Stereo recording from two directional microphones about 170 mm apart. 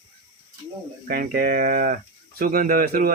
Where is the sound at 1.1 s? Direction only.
60° right (ahead or behind).